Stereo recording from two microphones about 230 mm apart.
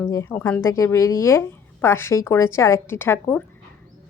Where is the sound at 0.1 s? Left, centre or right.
Centre.